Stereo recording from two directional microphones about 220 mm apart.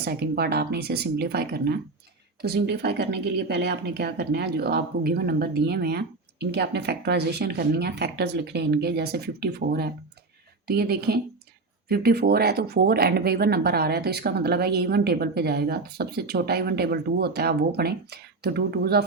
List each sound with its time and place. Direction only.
0.0 s speech: 45° right (ahead or behind)